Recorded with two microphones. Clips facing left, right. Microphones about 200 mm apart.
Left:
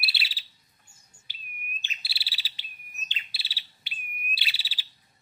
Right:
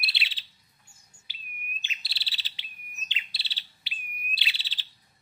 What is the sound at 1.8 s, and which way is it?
Bird, 45° left (ahead or behind).